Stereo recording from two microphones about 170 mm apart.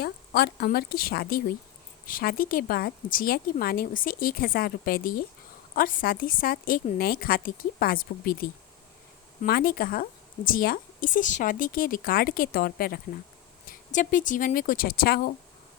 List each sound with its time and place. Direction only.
0.0 s a woman's voice: 70° left (ahead or behind)
9.5 s a woman's voice: 60° left (ahead or behind)
13.7 s speech: 50° left (ahead or behind)